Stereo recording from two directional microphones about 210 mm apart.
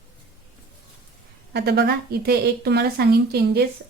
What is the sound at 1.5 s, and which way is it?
Speech, 50° right (ahead or behind).